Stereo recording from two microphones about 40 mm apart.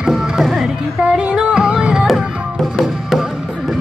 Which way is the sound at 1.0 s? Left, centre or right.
Right.